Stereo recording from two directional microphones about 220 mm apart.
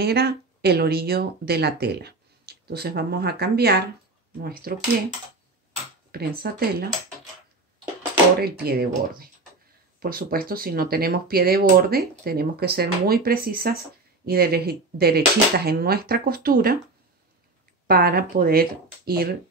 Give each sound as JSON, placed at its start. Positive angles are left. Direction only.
{"t": 0.0, "sound": "speech", "side_deg": -45}
{"t": 6.1, "sound": "speech", "side_deg": -45}
{"t": 8.4, "sound": "speech", "side_deg": -45}
{"t": 17.8, "sound": "speech", "side_deg": -40}